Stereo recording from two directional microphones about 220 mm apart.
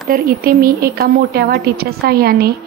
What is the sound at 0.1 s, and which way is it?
A woman's voice, 45° right (ahead or behind).